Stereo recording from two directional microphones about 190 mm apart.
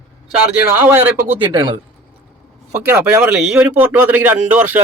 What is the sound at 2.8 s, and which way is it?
A man's voice, 10° right (ahead or behind).